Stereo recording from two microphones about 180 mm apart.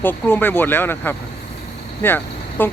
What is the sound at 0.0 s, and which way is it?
Speech, 10° left (ahead or behind).